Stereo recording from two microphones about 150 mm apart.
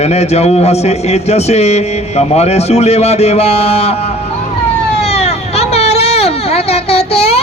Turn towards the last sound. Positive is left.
turn(degrees=40)  # may be behind; listen again after turning